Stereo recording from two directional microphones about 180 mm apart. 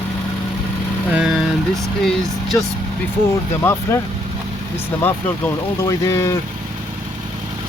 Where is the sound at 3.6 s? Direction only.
10° left (ahead or behind).